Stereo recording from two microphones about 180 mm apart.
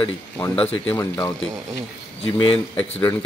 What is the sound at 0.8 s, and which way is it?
Speech, 15° left (ahead or behind).